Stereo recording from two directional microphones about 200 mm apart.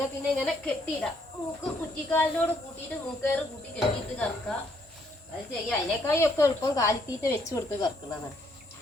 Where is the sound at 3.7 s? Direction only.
5° left (ahead or behind).